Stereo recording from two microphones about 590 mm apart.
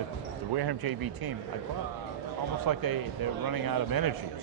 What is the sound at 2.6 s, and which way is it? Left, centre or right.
A man's voice, right.